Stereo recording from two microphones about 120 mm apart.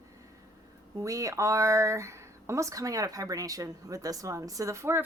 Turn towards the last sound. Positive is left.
turn(degrees=-20)  # may be behind; listen again after turning